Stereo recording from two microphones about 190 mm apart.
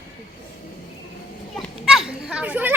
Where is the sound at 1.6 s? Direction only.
Centre (ahead or behind).